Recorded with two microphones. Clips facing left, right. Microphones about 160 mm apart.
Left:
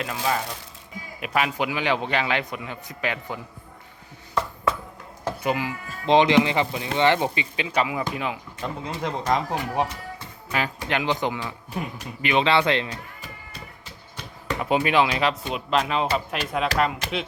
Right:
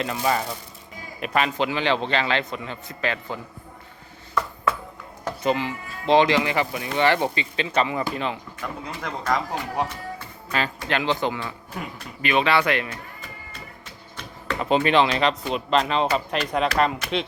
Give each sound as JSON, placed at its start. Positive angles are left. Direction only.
{"t": 0.0, "sound": "speech", "side_deg": 0}
{"t": 5.4, "sound": "speech", "side_deg": 10}
{"t": 8.6, "sound": "a man's voice", "side_deg": 20}
{"t": 14.4, "sound": "speech", "side_deg": 10}